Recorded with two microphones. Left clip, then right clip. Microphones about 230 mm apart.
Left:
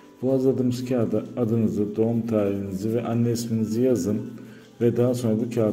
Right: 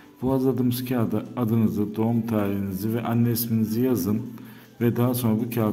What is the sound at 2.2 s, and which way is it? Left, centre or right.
A man's voice, right.